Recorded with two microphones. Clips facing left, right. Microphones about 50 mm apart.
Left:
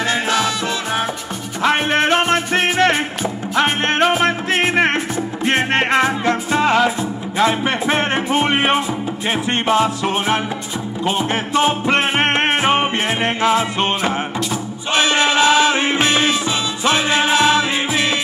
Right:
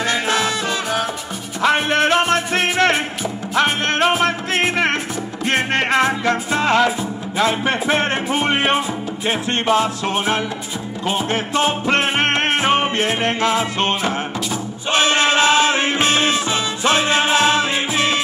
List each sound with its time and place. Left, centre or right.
1.7 s music: left
4.2 s music: left
9.7 s music: centre
11.5 s music: centre
14.9 s music: right
15.7 s music: left
16.3 s music: right